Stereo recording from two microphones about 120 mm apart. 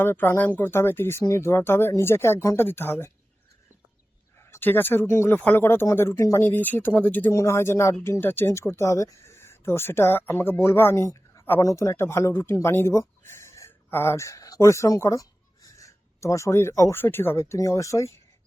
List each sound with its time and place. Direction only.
0.0 s speech: 20° left (ahead or behind)
4.4 s speech: 20° left (ahead or behind)